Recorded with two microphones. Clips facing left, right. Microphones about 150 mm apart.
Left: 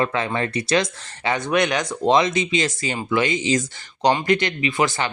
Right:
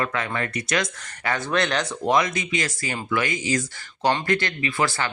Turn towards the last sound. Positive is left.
turn(degrees=20)  # may be behind; listen again after turning